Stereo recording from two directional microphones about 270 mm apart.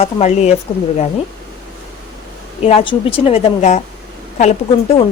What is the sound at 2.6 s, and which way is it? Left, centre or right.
Speech, left.